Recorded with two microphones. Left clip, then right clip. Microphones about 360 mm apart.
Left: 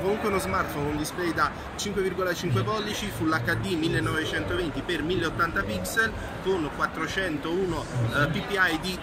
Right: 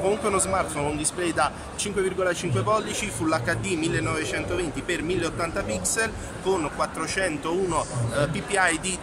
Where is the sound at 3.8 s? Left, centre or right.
Centre.